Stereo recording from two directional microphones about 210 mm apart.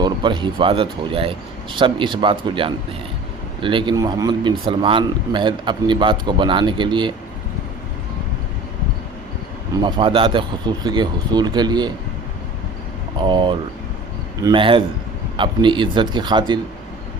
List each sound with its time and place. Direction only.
0.0 s a man's voice: 20° right (ahead or behind)
9.7 s a man's voice: 25° right (ahead or behind)
13.1 s a man's voice: 20° right (ahead or behind)